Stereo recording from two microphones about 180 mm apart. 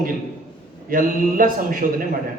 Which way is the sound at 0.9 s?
50° right (ahead or behind).